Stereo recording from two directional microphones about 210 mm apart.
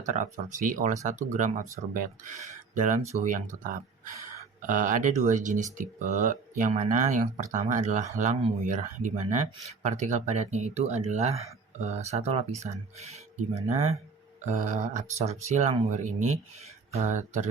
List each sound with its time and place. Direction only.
0.0 s speech: 35° right (ahead or behind)
16.9 s speech: 35° right (ahead or behind)